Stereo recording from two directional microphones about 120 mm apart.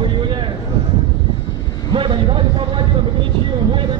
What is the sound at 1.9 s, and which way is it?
Speech, 45° right (ahead or behind).